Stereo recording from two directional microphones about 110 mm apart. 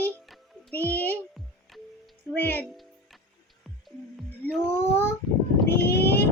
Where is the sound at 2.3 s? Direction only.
15° left (ahead or behind).